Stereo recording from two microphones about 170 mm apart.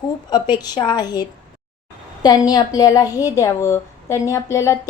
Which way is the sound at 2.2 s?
25° left (ahead or behind).